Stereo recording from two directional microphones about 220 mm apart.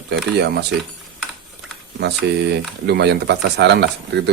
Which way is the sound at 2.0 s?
50° right (ahead or behind).